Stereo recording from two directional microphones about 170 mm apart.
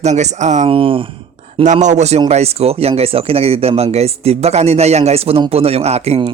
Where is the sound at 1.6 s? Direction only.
45° right (ahead or behind).